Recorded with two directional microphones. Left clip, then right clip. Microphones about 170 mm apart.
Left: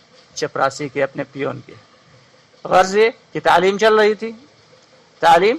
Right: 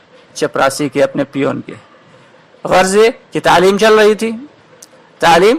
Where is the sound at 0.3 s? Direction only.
20° right (ahead or behind).